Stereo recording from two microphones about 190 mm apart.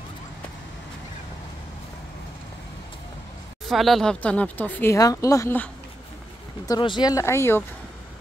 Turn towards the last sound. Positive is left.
turn(degrees=15)  # may be behind; listen again after turning